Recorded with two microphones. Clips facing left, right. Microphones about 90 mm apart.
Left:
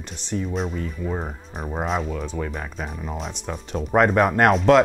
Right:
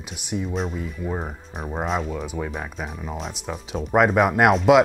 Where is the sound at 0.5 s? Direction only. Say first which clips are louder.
Left 1 dB; centre (ahead or behind).